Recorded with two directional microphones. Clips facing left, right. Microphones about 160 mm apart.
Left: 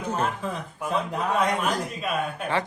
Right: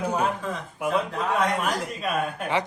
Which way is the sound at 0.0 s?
15° right (ahead or behind).